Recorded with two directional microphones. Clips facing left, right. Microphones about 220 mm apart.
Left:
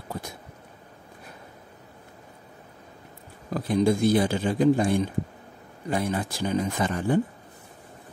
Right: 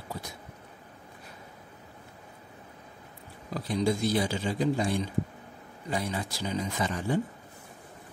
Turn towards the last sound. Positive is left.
turn(degrees=55)  # may be behind; listen again after turning